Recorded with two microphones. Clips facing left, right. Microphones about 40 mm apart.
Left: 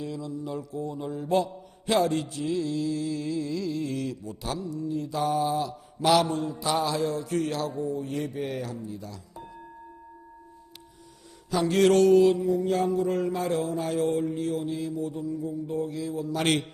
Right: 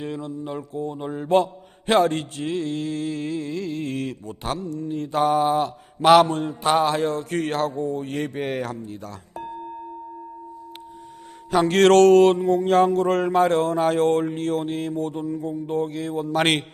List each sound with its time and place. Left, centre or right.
0.0 s mantra: right
11.5 s mantra: right